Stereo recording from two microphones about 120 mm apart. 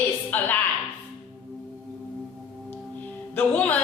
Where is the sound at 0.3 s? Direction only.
15° left (ahead or behind).